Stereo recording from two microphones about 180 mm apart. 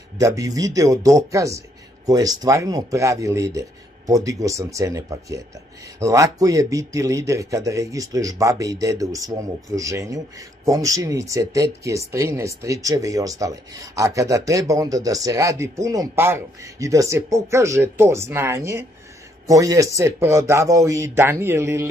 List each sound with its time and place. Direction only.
0.2 s speech: 20° right (ahead or behind)